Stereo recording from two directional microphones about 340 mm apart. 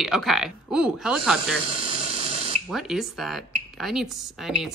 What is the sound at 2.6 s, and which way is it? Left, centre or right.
Speech, centre.